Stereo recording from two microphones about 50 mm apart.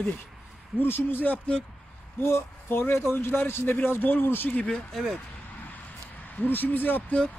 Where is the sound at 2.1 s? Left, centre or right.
Left.